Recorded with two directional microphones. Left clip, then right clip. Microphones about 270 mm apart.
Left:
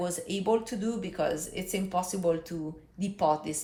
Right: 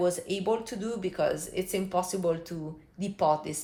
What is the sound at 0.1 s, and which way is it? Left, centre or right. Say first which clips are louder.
A woman's voice: left 1 dB; right.